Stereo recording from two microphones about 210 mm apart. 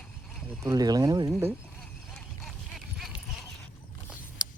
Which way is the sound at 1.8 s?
5° left (ahead or behind).